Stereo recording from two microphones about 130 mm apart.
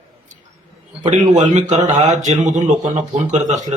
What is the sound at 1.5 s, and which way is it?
A man's voice, 60° right (ahead or behind).